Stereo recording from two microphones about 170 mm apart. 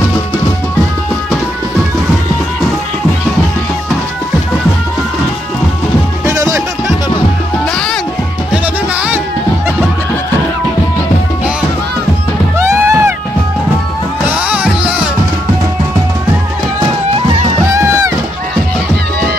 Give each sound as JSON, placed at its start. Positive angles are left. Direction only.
{"t": 6.2, "sound": "music", "side_deg": -15}
{"t": 12.5, "sound": "music", "side_deg": -15}
{"t": 14.3, "sound": "music", "side_deg": -5}
{"t": 17.7, "sound": "run", "side_deg": -20}